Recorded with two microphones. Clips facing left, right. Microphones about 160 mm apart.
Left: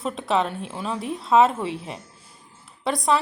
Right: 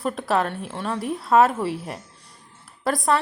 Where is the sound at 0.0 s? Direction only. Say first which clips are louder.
Right 1 dB; centre (ahead or behind).